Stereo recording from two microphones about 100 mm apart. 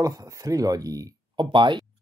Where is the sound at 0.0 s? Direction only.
35° right (ahead or behind).